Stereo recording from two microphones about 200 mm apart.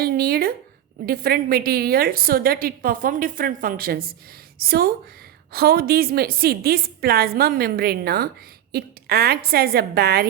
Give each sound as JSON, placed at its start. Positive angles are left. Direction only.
{"t": 0.0, "sound": "a woman's voice", "side_deg": -50}